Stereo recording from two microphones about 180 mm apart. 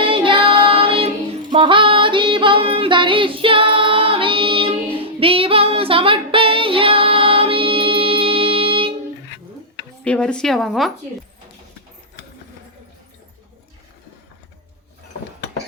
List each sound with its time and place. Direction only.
0.0 s child singing: 30° right (ahead or behind)
10.0 s speech: 5° left (ahead or behind)